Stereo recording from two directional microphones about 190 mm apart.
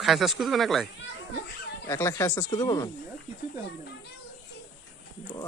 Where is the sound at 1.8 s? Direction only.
15° left (ahead or behind).